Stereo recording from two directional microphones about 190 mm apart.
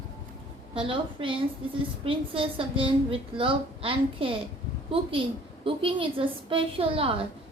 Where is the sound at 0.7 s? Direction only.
25° right (ahead or behind).